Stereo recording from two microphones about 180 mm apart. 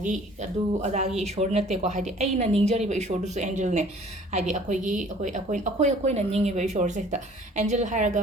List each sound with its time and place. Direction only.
0.8 s speech: 40° right (ahead or behind)